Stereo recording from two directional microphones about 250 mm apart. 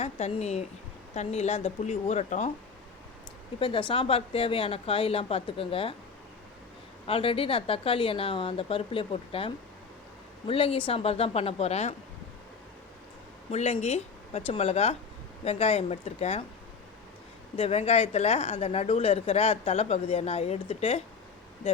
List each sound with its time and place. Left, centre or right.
0.0 s a woman's voice: left
3.6 s a woman's voice: centre
7.1 s a woman's voice: left
13.5 s a woman's voice: left
17.6 s a woman's voice: left